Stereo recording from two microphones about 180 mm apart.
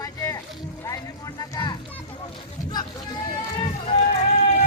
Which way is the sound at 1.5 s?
25° left (ahead or behind).